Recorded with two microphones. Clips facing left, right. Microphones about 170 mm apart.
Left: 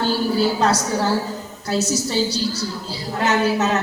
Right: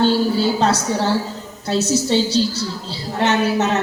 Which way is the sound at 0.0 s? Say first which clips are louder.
Right 3 dB; 25° right (ahead or behind).